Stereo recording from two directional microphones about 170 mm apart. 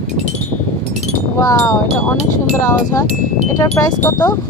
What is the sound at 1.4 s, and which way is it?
Speech, 20° left (ahead or behind).